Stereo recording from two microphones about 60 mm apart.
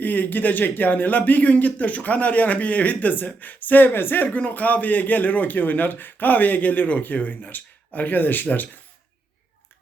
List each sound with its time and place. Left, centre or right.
0.0 s a man's voice: left